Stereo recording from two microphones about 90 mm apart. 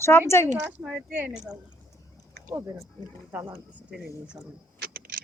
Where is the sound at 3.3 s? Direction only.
20° right (ahead or behind).